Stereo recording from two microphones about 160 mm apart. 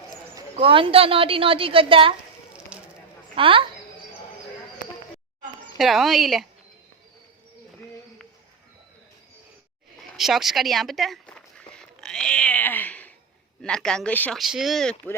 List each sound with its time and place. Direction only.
0.5 s a woman's voice: 35° right (ahead or behind)
2.7 s a sound: 5° right (ahead or behind)
3.3 s a woman's voice: 35° right (ahead or behind)
5.7 s a woman's voice: centre (ahead or behind)
10.2 s a sound: centre (ahead or behind)
13.6 s a woman's voice: 5° left (ahead or behind)